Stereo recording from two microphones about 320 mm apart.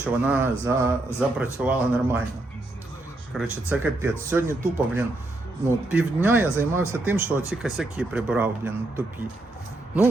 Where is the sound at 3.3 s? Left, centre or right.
Centre.